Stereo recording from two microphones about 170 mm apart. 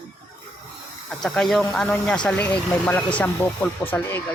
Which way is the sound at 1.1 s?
5° left (ahead or behind).